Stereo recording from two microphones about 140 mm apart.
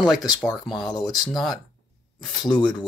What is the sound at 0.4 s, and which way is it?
Speech, 5° left (ahead or behind).